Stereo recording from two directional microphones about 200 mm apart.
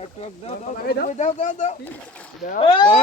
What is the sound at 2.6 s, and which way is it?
Speech, 25° left (ahead or behind).